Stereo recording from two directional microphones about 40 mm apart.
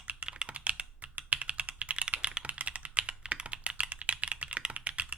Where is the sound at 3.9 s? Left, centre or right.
Right.